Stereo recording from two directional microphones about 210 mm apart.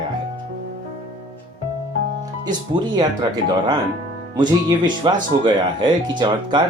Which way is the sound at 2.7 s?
20° right (ahead or behind).